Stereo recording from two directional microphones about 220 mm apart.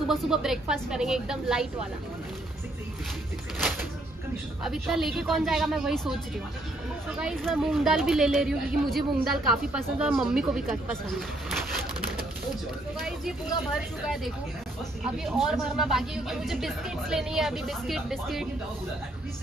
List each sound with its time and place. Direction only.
0.1 s speech: centre (ahead or behind)
4.6 s speech: centre (ahead or behind)
13.7 s speech: centre (ahead or behind)